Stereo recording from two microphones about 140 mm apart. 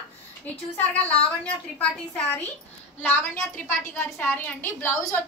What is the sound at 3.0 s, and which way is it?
A woman's voice, 10° left (ahead or behind).